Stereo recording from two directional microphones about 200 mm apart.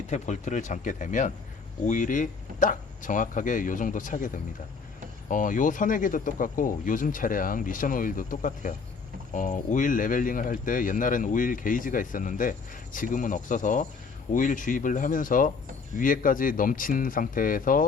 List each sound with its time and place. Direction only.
0.1 s speech: 40° left (ahead or behind)
5.3 s speech: 40° left (ahead or behind)